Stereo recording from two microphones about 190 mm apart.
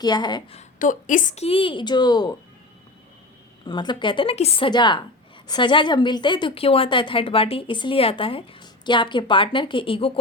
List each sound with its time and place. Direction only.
0.0 s a woman's voice: 20° left (ahead or behind)
0.8 s a woman's voice: 45° left (ahead or behind); by 2.3 s 20° left (ahead or behind)
3.7 s a woman's voice: 25° left (ahead or behind)